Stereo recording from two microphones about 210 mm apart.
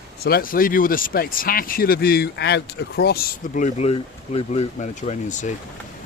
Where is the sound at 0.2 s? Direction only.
45° left (ahead or behind).